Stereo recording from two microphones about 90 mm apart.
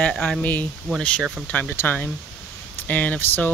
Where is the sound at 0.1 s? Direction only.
10° left (ahead or behind).